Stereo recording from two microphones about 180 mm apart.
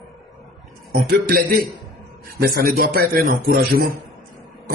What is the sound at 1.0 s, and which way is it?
A man's voice, 50° right (ahead or behind).